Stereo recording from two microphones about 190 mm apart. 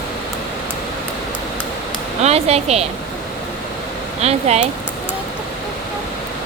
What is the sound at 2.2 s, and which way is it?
Speech, 35° right (ahead or behind).